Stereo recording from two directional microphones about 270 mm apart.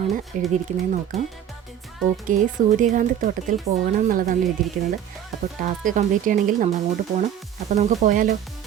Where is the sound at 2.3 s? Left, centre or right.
Right.